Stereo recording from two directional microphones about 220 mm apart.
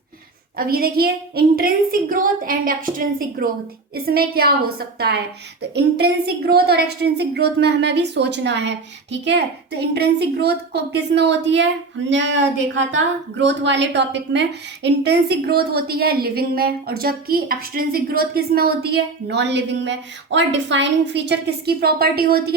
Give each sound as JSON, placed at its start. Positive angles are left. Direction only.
{"t": 0.5, "sound": "a woman's voice", "side_deg": -40}